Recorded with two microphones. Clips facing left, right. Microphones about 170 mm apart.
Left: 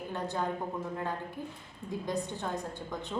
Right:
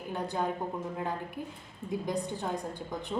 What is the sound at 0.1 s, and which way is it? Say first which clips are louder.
Speech: right 2 dB; 10° right (ahead or behind).